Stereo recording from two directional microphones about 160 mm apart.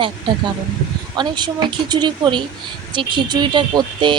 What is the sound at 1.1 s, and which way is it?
Speech, 25° right (ahead or behind).